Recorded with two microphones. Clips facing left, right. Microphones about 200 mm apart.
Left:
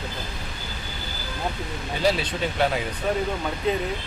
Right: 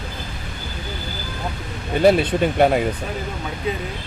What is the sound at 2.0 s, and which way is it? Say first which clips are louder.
Speech: right 9 dB; 55° right (ahead or behind).